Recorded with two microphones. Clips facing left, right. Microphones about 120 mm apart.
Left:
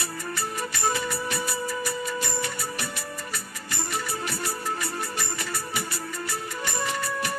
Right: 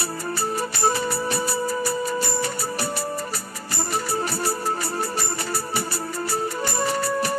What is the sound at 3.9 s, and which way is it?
Music, 35° right (ahead or behind).